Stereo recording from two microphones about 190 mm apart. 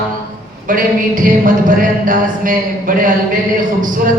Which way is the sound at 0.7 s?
45° right (ahead or behind).